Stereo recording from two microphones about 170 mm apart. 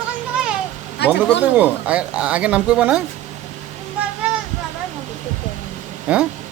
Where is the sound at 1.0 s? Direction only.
75° left (ahead or behind).